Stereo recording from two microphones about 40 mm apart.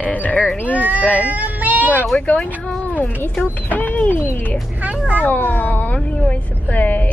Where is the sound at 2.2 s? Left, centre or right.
Left.